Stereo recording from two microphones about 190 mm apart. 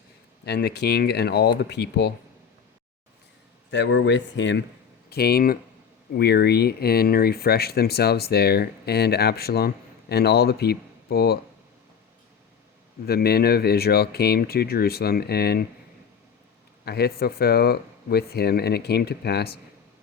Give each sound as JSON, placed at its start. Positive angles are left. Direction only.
{"t": 0.4, "sound": "speech", "side_deg": 60}
{"t": 3.7, "sound": "speech", "side_deg": 70}
{"t": 5.0, "sound": "speech", "side_deg": 55}
{"t": 13.1, "sound": "speech", "side_deg": 55}
{"t": 16.8, "sound": "speech", "side_deg": 55}